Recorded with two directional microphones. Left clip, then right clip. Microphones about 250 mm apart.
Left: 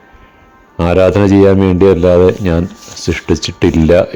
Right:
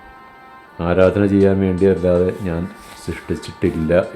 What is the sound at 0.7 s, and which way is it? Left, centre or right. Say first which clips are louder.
Speech: left 5 dB; left.